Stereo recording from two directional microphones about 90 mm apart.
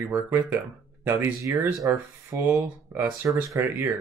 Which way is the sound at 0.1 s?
25° right (ahead or behind).